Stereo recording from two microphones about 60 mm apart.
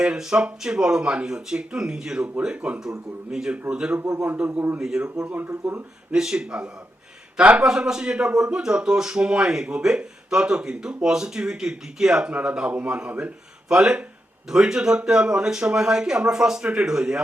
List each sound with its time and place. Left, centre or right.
0.0 s speech: centre
5.2 s speech: right
6.1 s speech: centre